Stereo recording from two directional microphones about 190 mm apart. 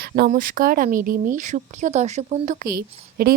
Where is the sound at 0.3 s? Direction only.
45° right (ahead or behind).